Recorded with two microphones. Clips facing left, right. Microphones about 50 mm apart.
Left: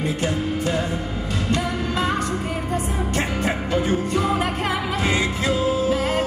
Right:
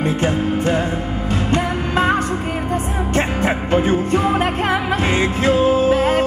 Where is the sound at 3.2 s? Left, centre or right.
Right.